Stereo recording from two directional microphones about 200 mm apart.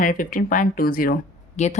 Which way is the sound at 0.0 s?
45° left (ahead or behind).